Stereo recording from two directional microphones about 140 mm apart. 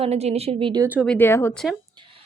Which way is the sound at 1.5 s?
5° left (ahead or behind).